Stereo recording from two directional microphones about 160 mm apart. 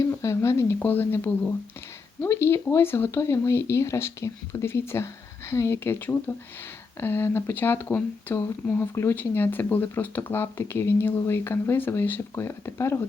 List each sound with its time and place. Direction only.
0.0 s speech: 20° left (ahead or behind)